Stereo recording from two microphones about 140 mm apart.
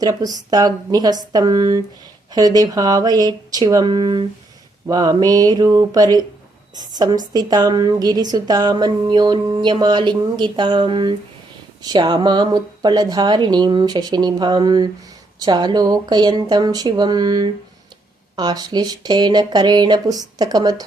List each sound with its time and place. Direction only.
0.0 s speech: 30° right (ahead or behind)